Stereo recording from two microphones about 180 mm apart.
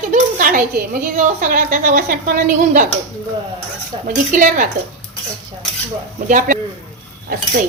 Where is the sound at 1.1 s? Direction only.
45° right (ahead or behind).